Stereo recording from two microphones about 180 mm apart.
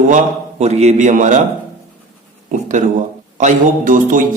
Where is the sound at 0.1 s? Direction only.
40° right (ahead or behind).